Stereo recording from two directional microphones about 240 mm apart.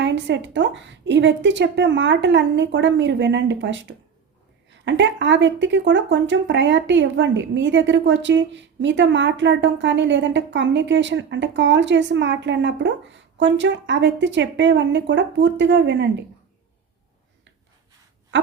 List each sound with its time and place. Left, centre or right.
0.0 s speech: right